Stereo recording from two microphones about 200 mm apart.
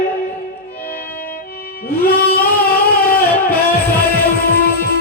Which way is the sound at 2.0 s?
50° left (ahead or behind).